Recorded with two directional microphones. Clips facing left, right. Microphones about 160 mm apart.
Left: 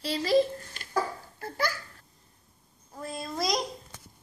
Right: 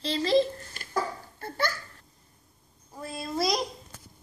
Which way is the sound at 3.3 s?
5° right (ahead or behind).